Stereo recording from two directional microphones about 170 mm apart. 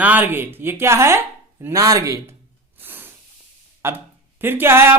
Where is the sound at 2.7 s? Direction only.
10° right (ahead or behind).